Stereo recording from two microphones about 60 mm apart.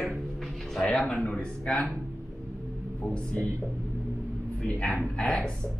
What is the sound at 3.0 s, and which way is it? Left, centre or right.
Speech, centre.